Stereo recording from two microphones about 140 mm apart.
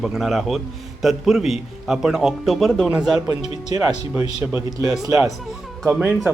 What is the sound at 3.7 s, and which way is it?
Speech, 25° right (ahead or behind).